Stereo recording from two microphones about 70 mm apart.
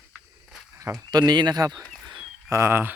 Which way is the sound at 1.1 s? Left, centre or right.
Right.